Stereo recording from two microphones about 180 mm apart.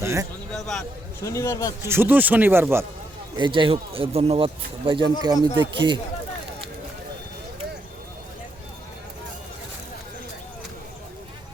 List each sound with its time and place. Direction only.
0.0 s a sound: 15° right (ahead or behind)
0.5 s speech: 5° left (ahead or behind)
1.2 s a man's voice: 15° left (ahead or behind)
1.8 s speech: 15° right (ahead or behind)
3.3 s speech: 25° right (ahead or behind)